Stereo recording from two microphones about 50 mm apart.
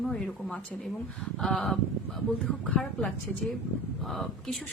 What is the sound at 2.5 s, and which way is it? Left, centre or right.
Speech, centre.